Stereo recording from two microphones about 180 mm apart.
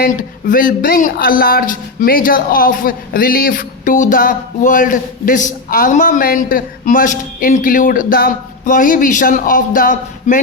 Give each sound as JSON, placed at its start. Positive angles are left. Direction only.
{"t": 0.0, "sound": "speech", "side_deg": 50}